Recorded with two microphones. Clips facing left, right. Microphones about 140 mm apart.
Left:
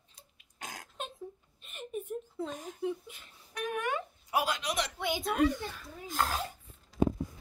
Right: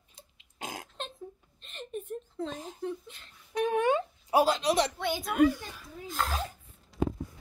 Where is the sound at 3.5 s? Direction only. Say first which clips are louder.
Right 8 dB; 25° right (ahead or behind).